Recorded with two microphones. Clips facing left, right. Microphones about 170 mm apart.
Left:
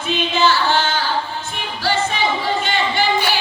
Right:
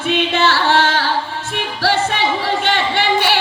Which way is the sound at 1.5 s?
70° right (ahead or behind).